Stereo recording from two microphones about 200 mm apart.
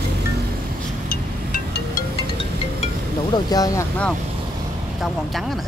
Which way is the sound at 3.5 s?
20° left (ahead or behind).